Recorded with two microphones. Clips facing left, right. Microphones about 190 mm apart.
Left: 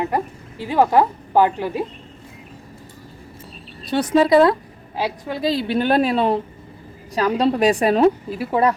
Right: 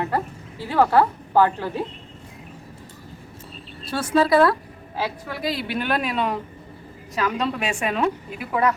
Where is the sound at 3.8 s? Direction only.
20° left (ahead or behind).